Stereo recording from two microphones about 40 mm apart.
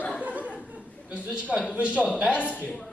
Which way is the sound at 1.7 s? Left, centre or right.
Right.